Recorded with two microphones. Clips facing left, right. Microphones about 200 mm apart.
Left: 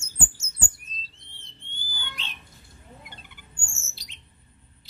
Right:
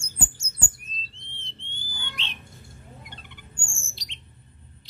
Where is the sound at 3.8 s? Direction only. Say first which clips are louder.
Right 3 dB; 5° left (ahead or behind).